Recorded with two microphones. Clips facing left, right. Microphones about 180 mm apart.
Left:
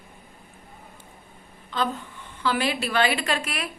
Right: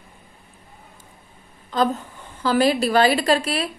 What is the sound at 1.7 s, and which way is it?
A woman's voice, 40° right (ahead or behind).